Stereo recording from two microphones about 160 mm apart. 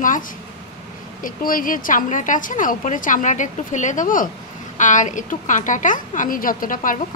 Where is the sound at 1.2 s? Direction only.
60° left (ahead or behind).